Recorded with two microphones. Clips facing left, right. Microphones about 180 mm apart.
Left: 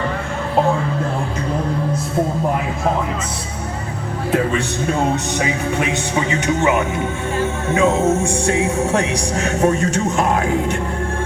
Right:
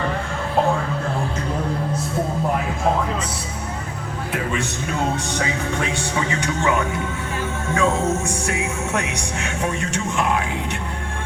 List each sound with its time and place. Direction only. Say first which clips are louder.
5.4 s speech: left 4 dB; 20° left (ahead or behind); by 10.8 s 45° left (ahead or behind)